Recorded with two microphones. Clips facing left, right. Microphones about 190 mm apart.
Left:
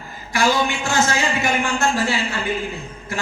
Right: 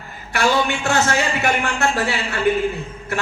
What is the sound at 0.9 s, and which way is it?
Speech, 65° right (ahead or behind).